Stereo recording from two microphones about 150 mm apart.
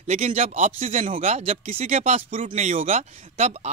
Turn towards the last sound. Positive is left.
turn(degrees=-45)  # may be behind; listen again after turning